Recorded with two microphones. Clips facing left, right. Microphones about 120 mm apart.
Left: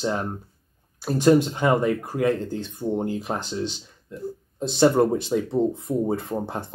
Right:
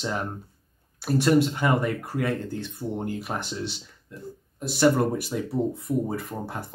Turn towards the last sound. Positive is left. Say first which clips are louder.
# left 4 dB
turn(degrees=25)  # may be behind; listen again after turning